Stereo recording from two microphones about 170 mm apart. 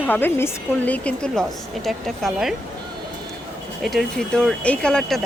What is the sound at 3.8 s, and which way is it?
Speech, centre (ahead or behind).